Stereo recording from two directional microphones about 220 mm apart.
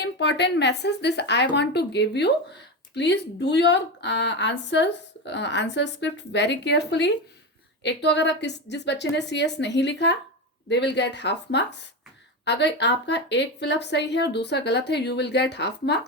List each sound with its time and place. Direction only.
0.0 s a woman's voice: 50° left (ahead or behind)